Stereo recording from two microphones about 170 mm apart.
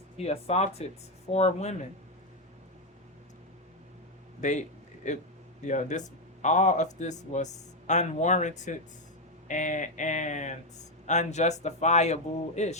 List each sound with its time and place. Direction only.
0.2 s speech: 40° left (ahead or behind)
4.4 s a man's voice: 45° left (ahead or behind)